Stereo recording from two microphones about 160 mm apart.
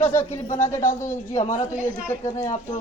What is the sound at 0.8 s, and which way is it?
Speech, 50° left (ahead or behind).